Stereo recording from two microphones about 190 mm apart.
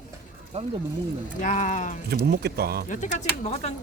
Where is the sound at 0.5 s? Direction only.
30° right (ahead or behind).